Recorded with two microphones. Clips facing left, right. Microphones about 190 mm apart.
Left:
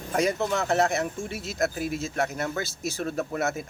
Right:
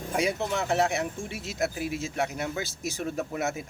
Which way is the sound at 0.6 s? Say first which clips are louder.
Even; 10° right (ahead or behind).